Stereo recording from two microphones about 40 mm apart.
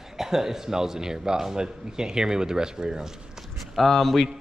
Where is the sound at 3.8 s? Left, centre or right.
Centre.